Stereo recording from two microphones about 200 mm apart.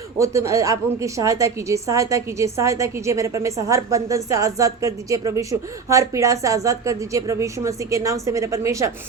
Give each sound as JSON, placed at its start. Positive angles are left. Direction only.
{"t": 0.2, "sound": "a woman's voice", "side_deg": -15}